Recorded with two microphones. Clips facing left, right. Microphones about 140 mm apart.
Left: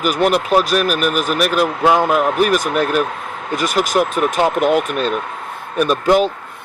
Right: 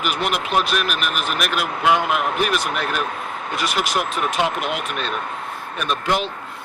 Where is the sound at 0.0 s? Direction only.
40° left (ahead or behind).